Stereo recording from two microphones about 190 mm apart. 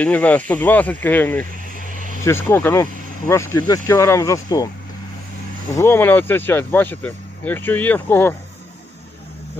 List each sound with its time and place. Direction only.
0.0 s speech: 10° left (ahead or behind)
1.7 s vehicle: 45° right (ahead or behind)
2.2 s speech: 15° left (ahead or behind)
5.7 s speech: 15° left (ahead or behind)